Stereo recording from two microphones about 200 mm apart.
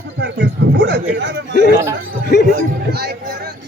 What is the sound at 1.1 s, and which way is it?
Speech, 65° right (ahead or behind).